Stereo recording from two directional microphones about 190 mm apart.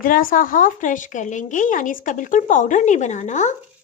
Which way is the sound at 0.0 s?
45° left (ahead or behind).